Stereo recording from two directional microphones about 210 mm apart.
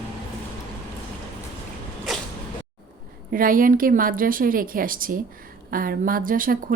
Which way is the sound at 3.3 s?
40° right (ahead or behind).